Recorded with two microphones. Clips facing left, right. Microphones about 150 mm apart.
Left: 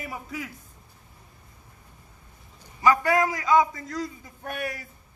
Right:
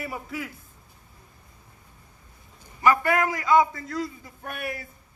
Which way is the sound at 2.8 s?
15° left (ahead or behind).